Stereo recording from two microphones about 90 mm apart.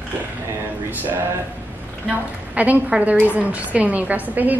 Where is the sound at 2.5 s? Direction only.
15° right (ahead or behind).